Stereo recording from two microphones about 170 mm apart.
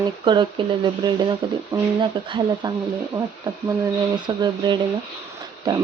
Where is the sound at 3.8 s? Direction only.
25° right (ahead or behind).